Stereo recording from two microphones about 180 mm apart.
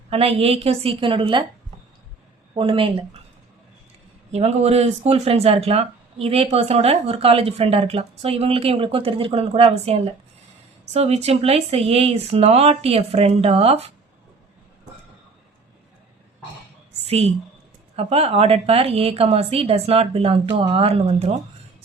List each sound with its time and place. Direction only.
0.1 s speech: 35° right (ahead or behind)
2.6 s speech: 30° right (ahead or behind)
4.3 s speech: 35° right (ahead or behind)
16.9 s a sound: 35° right (ahead or behind)
17.9 s speech: 35° right (ahead or behind)